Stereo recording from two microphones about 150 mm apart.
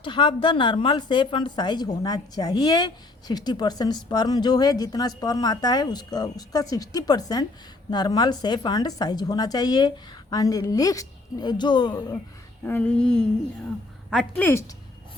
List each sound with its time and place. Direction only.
0.0 s a woman's voice: 35° left (ahead or behind)
12.6 s a sound: 10° left (ahead or behind)
14.1 s a woman's voice: centre (ahead or behind)